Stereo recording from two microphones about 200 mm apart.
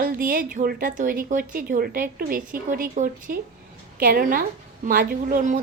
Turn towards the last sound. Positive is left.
turn(degrees=-40)  # may be behind; listen again after turning